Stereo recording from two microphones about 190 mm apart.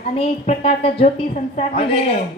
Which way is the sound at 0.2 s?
30° left (ahead or behind).